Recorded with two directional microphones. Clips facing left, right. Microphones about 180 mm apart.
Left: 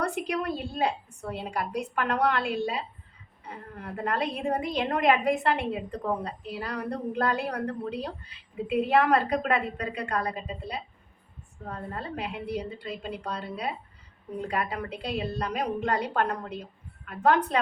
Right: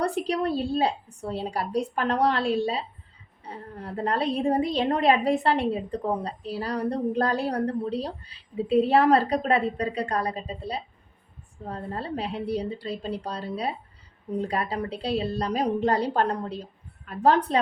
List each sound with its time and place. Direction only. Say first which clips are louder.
0.0 s a woman's voice: right 4 dB; 35° right (ahead or behind)